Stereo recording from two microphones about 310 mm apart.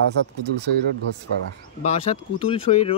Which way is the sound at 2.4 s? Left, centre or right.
Centre.